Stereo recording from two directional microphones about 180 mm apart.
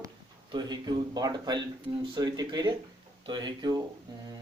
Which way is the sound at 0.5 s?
25° right (ahead or behind).